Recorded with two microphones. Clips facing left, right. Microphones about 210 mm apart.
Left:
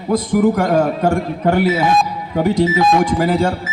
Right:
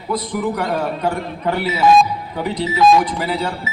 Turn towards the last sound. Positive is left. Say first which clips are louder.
# left 6 dB
turn(degrees=45)  # may be behind; listen again after turning